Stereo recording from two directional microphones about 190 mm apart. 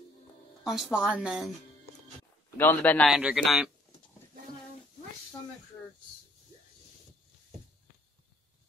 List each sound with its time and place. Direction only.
0.7 s speech: centre (ahead or behind)
2.5 s a man's voice: 10° left (ahead or behind)
3.1 s speech: 5° right (ahead or behind)